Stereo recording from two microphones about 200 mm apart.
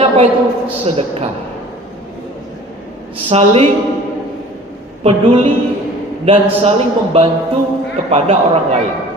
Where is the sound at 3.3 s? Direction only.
30° right (ahead or behind).